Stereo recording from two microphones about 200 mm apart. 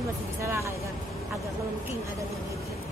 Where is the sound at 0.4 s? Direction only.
15° right (ahead or behind).